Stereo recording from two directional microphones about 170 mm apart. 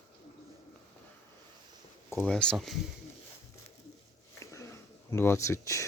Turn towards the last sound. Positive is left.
turn(degrees=20)  # may be behind; listen again after turning